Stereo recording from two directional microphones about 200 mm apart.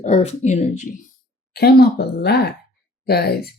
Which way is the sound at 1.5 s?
50° left (ahead or behind).